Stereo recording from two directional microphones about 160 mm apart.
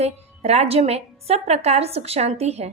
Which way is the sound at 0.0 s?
40° right (ahead or behind).